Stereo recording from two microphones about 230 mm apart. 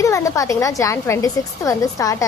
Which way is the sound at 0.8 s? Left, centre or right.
Centre.